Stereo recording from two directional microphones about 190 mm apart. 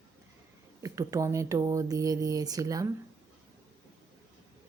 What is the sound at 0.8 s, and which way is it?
Speech, 15° right (ahead or behind).